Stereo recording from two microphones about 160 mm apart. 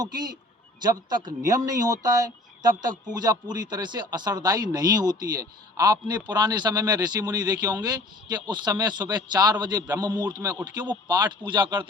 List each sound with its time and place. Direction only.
0.0 s speech: 25° right (ahead or behind)